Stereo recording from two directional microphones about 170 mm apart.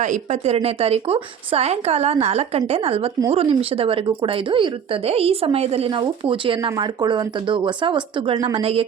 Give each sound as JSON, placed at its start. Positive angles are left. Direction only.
{"t": 0.0, "sound": "a woman's voice", "side_deg": -45}